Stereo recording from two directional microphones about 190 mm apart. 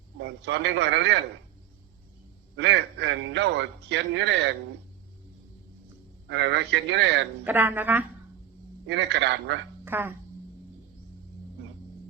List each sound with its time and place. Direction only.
0.2 s a man's voice: 65° right (ahead or behind)
2.6 s a man's voice: 65° right (ahead or behind)
6.2 s a man's voice: 65° right (ahead or behind)
7.4 s speech: 10° right (ahead or behind)
8.9 s a man's voice: 65° right (ahead or behind)
9.8 s speech: 10° right (ahead or behind)